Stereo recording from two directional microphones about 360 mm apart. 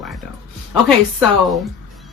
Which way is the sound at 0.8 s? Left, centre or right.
Centre.